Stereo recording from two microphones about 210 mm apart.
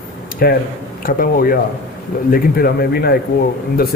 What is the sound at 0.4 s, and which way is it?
Speech, 45° left (ahead or behind).